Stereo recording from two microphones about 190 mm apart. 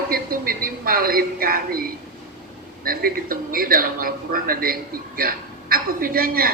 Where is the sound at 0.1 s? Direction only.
50° right (ahead or behind).